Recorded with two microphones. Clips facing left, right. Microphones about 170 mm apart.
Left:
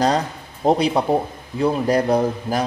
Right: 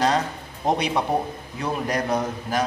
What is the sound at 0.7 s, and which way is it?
Speech, 35° left (ahead or behind).